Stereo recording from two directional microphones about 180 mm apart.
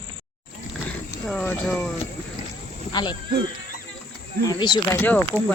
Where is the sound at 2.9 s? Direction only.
25° left (ahead or behind).